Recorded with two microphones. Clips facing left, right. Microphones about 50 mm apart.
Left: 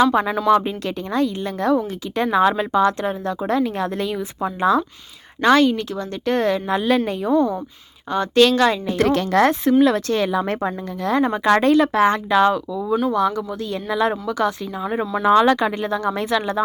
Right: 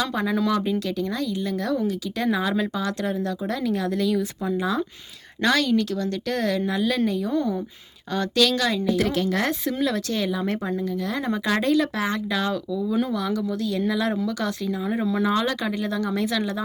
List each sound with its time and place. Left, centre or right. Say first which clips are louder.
0.0 s a woman's voice: left 7 dB; left
4.5 s a woman's voice: left 8 dB; left
5.4 s a woman's voice: left 6 dB; left
8.4 s a woman's voice: left 7 dB; left
8.9 s speech: left 4 dB; left
12.9 s speech: left 5 dB; centre
13.3 s a woman's voice: even; left
15.2 s a woman's voice: left 13 dB; left